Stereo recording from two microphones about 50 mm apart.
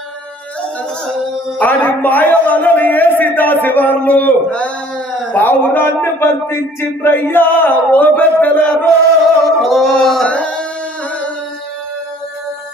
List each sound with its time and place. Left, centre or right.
1.5 s a man's voice: left
5.4 s a man's voice: left
9.6 s singing: centre
10.2 s singing: left